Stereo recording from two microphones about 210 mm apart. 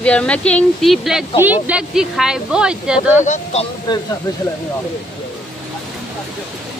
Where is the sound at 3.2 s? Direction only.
35° left (ahead or behind).